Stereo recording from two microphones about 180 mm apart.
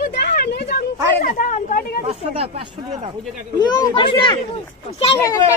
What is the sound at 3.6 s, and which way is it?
A child's voice, 25° left (ahead or behind).